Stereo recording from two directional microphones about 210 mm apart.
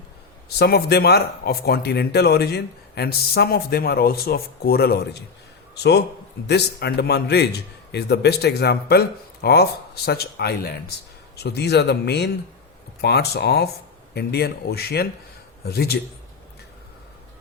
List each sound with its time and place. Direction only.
0.6 s a man's voice: 50° left (ahead or behind)